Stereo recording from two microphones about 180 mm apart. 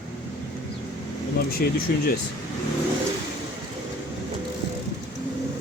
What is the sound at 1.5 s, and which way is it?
Speech, 55° left (ahead or behind).